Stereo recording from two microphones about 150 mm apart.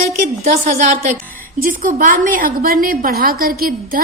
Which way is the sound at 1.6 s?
70° right (ahead or behind).